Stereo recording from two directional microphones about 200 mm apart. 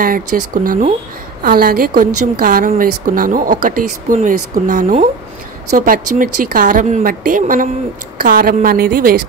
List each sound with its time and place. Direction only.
0.0 s speech: 45° right (ahead or behind)